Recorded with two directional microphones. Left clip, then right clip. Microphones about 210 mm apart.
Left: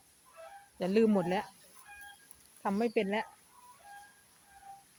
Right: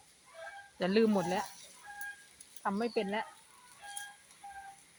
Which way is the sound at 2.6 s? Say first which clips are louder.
Left 2 dB; 20° left (ahead or behind).